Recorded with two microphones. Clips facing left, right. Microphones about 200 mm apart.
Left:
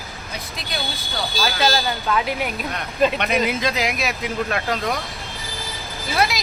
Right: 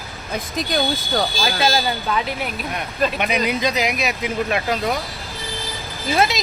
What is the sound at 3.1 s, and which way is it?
Speech, centre (ahead or behind).